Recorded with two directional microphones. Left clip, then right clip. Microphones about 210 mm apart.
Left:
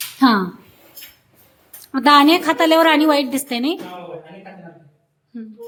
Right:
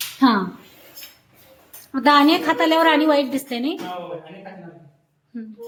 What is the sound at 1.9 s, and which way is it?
A woman's voice, 20° left (ahead or behind).